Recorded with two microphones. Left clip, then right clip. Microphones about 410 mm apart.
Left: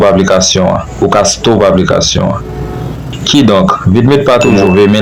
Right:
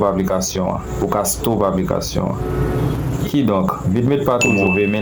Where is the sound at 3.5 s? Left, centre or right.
Right.